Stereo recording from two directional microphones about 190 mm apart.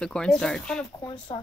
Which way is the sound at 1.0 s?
20° left (ahead or behind).